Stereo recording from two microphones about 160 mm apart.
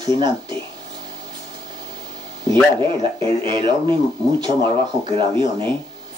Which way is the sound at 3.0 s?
30° right (ahead or behind).